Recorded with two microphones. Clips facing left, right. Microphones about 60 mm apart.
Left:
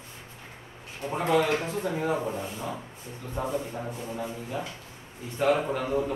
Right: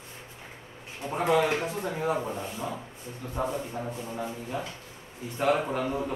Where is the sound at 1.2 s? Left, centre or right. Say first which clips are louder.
Even; centre.